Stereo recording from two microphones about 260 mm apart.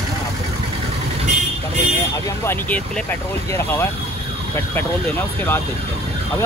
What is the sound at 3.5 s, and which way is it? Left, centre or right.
Speech, centre.